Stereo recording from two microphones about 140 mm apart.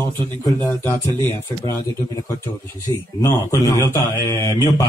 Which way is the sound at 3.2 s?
20° left (ahead or behind).